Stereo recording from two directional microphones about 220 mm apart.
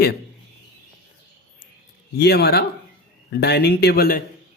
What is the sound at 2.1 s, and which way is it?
Speech, 45° left (ahead or behind).